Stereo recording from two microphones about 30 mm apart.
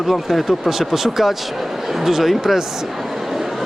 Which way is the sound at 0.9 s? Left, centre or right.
Centre.